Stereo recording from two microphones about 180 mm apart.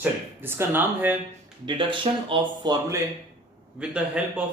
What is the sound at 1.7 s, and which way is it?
Speech, 30° right (ahead or behind).